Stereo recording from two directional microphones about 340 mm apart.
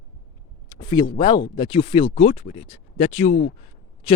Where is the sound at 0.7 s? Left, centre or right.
Centre.